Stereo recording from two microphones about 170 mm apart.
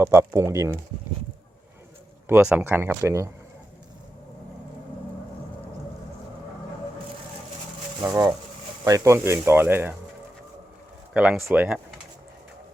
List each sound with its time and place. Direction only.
0.0 s speech: 15° right (ahead or behind)
2.2 s speech: 10° right (ahead or behind)
8.0 s speech: 20° right (ahead or behind)
11.1 s speech: 5° right (ahead or behind)